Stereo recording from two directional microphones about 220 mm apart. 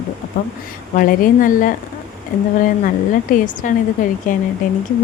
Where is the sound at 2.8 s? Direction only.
35° left (ahead or behind).